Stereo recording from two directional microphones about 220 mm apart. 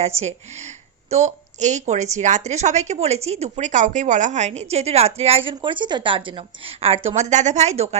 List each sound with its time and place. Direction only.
1.1 s a woman's voice: 30° right (ahead or behind)